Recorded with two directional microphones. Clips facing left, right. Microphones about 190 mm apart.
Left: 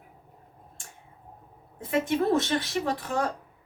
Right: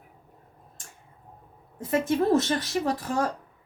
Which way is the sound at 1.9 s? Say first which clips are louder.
Right 2 dB; 40° right (ahead or behind).